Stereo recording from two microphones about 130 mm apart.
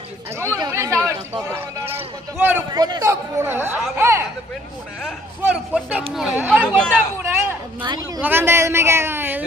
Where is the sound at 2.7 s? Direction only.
30° right (ahead or behind).